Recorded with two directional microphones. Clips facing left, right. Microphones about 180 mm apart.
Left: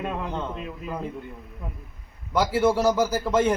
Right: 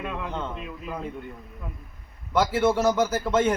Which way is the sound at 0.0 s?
35° left (ahead or behind).